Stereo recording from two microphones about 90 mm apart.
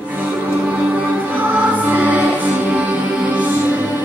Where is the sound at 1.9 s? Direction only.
15° right (ahead or behind).